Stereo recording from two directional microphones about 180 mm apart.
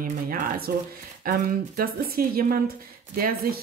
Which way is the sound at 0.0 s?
55° right (ahead or behind).